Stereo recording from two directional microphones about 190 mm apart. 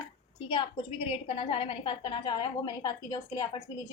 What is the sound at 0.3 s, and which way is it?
A woman's voice, 25° left (ahead or behind).